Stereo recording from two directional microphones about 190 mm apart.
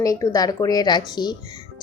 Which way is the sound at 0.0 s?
20° left (ahead or behind).